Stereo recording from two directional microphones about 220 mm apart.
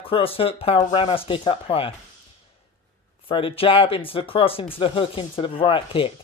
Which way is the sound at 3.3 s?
25° left (ahead or behind).